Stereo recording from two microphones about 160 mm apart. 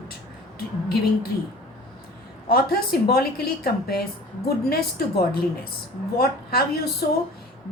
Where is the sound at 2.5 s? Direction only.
70° left (ahead or behind).